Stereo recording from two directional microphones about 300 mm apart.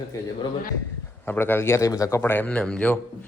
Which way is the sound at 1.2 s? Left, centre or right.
Centre.